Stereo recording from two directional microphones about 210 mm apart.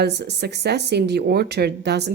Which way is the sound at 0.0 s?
50° right (ahead or behind).